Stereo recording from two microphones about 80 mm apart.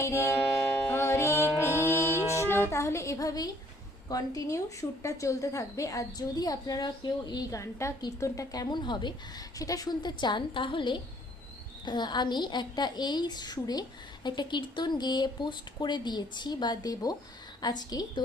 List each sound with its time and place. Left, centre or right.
0.0 s a woman's voice: left
0.6 s music: left
2.7 s a woman's voice: left
7.5 s a woman's voice: left
8.7 s a woman's voice: left
9.6 s a woman's voice: left
11.9 s speech: left
14.3 s speech: left